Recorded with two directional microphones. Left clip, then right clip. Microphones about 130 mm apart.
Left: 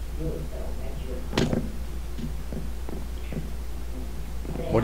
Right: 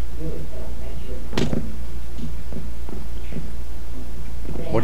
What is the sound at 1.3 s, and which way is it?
Vehicle, centre (ahead or behind).